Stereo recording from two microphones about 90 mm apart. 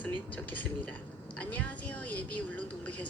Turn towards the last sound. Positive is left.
turn(degrees=15)  # may be behind; listen again after turning